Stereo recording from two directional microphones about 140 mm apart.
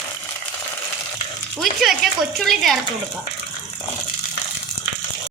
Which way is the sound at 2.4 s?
Centre (ahead or behind).